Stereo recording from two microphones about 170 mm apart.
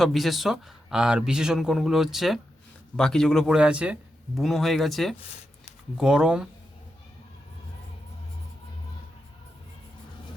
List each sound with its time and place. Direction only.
0.0 s speech: centre (ahead or behind)